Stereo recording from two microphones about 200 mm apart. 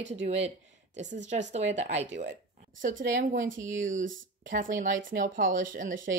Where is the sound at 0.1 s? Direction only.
30° right (ahead or behind).